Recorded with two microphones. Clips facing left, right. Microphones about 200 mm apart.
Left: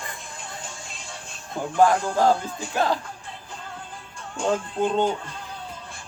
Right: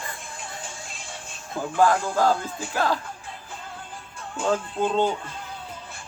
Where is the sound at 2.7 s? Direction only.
20° left (ahead or behind).